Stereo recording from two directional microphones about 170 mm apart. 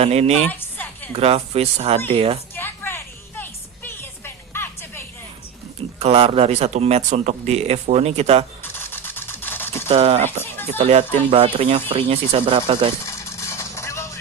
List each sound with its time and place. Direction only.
0.0 s speech: 40° right (ahead or behind)
0.4 s music: 10° left (ahead or behind)
1.1 s speech: 35° right (ahead or behind)
2.6 s music: 10° left (ahead or behind)
6.0 s speech: 35° right (ahead or behind)
8.6 s camera: 15° left (ahead or behind)
9.9 s speech: 35° right (ahead or behind)
13.1 s vehicle: 15° left (ahead or behind)